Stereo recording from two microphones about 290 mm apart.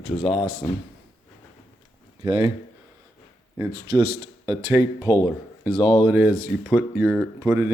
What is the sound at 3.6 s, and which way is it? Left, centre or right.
Speech, centre.